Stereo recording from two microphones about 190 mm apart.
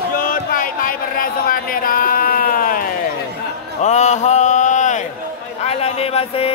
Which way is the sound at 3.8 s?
35° left (ahead or behind).